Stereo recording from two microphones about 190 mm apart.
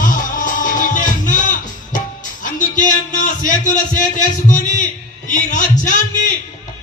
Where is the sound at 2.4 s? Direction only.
40° left (ahead or behind).